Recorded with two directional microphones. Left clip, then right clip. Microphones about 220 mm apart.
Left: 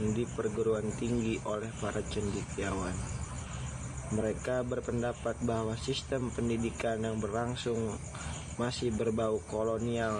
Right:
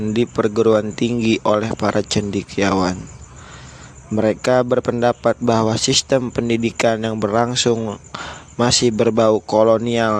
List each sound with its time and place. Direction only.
0.1 s speech: 50° right (ahead or behind)
4.2 s speech: 55° right (ahead or behind)